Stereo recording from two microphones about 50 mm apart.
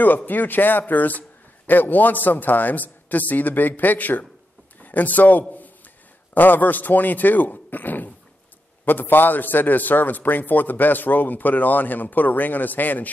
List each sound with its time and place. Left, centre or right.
0.0 s a man's voice: left